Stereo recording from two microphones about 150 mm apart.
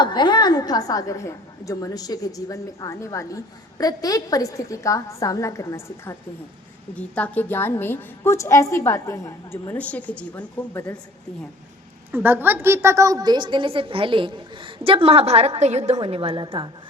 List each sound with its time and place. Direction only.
0.0 s a woman's voice: 30° left (ahead or behind); by 10.8 s 10° left (ahead or behind)
12.1 s a woman's voice: 15° right (ahead or behind); by 16.6 s 35° right (ahead or behind)